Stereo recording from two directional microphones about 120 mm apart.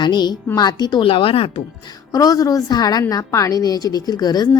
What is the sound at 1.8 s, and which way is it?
A woman's voice, 30° left (ahead or behind).